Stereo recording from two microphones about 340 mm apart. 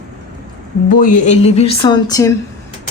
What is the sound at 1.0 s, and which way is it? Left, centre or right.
Speech, left.